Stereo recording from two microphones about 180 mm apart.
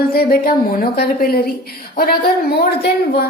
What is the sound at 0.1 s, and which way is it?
A woman's voice, 55° left (ahead or behind).